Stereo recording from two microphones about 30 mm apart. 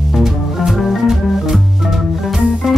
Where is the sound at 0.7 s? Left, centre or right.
Centre.